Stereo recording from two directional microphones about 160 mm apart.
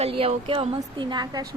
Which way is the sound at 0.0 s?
35° right (ahead or behind).